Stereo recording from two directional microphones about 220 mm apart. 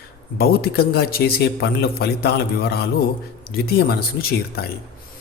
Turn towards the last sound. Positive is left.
turn(degrees=45)  # may be behind; listen again after turning